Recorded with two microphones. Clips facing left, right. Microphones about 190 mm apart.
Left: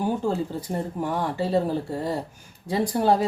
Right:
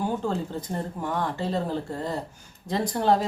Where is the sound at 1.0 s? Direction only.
10° left (ahead or behind).